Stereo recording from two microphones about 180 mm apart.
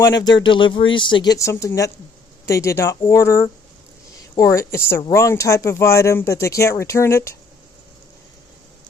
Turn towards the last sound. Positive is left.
turn(degrees=15)  # may be behind; listen again after turning